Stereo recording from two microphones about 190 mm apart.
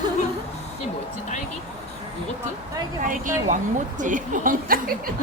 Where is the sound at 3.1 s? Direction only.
45° right (ahead or behind).